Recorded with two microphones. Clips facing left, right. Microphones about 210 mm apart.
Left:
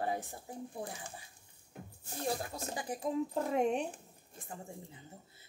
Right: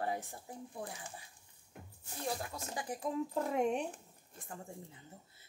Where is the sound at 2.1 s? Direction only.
35° left (ahead or behind).